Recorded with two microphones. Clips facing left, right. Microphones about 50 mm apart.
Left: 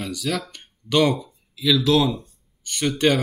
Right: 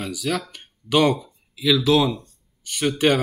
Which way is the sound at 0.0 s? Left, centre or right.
Centre.